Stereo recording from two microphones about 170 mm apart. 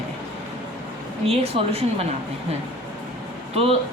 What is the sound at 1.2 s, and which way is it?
Speech, 35° right (ahead or behind).